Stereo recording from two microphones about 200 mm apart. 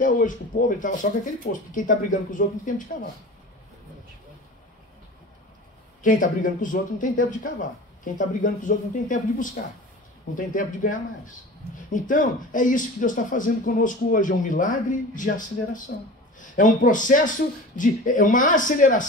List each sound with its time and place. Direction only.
0.0 s speech: 40° left (ahead or behind)
6.0 s a man's voice: 40° left (ahead or behind)